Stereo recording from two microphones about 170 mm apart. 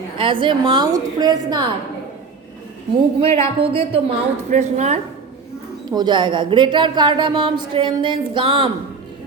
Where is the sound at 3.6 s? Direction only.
35° right (ahead or behind).